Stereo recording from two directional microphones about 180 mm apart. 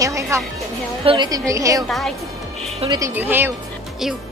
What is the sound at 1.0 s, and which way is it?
Speech, 25° right (ahead or behind).